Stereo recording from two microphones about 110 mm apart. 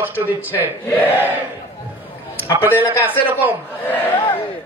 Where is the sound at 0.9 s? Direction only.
20° left (ahead or behind).